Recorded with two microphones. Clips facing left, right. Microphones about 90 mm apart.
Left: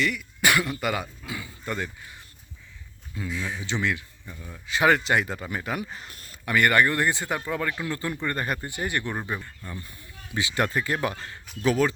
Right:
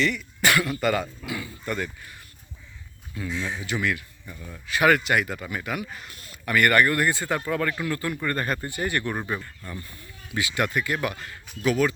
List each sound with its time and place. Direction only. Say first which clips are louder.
0.0 s throat clearing: right 1 dB; 10° left (ahead or behind)
0.5 s speech: right 2 dB; 20° left (ahead or behind)
3.2 s speech: right 2 dB; 25° right (ahead or behind)
3.7 s speech: even; 25° left (ahead or behind)
4.3 s speech: right 1 dB; 5° left (ahead or behind)
4.7 s speech: right 1 dB; 25° left (ahead or behind)
6.4 s speech: right 1 dB; 20° left (ahead or behind)
10.5 s speech: even; 30° left (ahead or behind)